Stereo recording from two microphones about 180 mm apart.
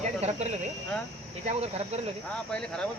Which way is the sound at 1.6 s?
35° right (ahead or behind).